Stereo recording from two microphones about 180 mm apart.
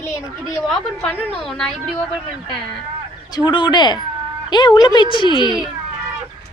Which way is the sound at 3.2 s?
20° left (ahead or behind).